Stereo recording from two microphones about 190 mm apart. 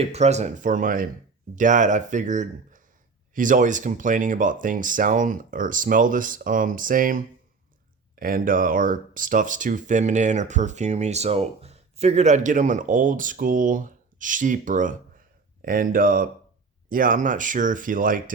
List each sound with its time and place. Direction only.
0.0 s speech: 35° right (ahead or behind)